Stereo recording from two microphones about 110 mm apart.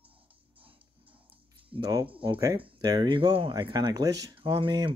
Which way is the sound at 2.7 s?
35° right (ahead or behind).